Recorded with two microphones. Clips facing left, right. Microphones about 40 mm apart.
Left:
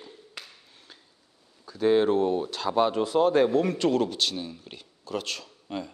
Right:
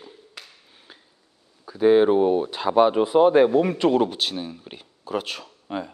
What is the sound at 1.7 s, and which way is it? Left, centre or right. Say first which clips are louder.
Speech: right 5 dB; centre.